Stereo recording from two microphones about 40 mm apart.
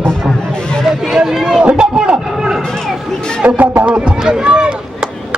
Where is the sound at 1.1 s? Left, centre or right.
Centre.